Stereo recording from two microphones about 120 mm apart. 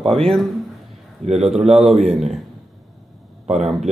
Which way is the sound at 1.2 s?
70° right (ahead or behind).